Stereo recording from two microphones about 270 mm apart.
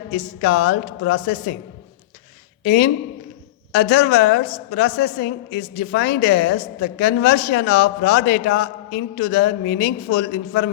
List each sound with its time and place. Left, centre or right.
0.4 s speech: left
2.6 s a woman's voice: left